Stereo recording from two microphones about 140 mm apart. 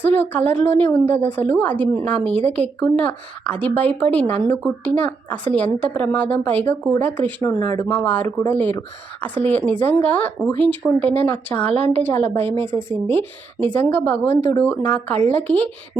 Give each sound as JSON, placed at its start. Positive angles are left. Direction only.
{"t": 0.0, "sound": "a woman's voice", "side_deg": 10}